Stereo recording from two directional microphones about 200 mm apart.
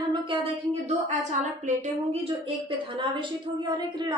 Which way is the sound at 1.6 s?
35° right (ahead or behind).